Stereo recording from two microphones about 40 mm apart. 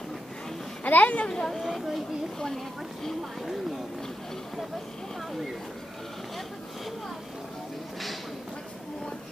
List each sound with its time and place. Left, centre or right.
0.8 s a child's voice: left
1.2 s speech: centre
1.6 s speech: centre
2.3 s speech: centre